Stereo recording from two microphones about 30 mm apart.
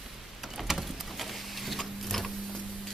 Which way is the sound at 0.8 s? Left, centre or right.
Centre.